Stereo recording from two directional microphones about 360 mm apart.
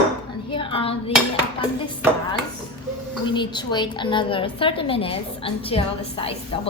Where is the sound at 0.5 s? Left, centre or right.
Centre.